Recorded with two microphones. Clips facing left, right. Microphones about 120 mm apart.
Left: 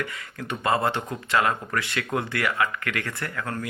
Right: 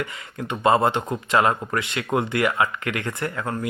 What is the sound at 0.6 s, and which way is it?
A man's voice, 20° right (ahead or behind).